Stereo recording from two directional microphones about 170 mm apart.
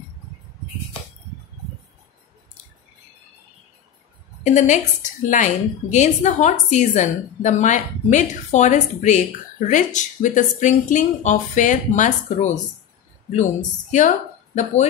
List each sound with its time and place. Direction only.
4.4 s a woman's voice: 45° left (ahead or behind)